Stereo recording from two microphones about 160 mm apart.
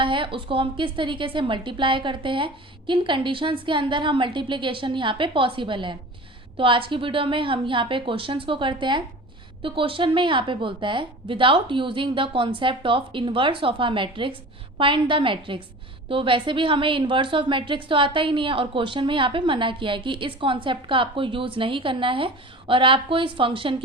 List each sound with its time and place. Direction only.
0.0 s a woman's voice: 30° right (ahead or behind)